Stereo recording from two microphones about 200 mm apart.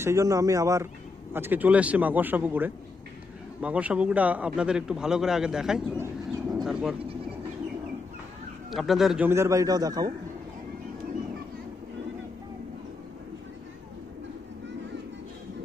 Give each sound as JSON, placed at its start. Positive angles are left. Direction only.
{"t": 0.0, "sound": "a man's voice", "side_deg": -15}
{"t": 6.5, "sound": "goat", "side_deg": 0}
{"t": 8.6, "sound": "speech", "side_deg": 0}
{"t": 9.3, "sound": "a man's voice", "side_deg": -15}